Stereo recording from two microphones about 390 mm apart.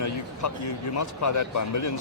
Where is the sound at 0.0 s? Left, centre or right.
Left.